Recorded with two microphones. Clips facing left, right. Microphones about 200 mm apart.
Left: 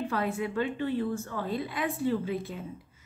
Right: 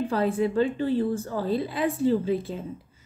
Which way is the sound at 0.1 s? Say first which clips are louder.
Right 6 dB; 30° right (ahead or behind).